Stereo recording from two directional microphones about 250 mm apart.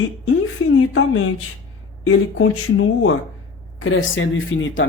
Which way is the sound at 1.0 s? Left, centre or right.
Left.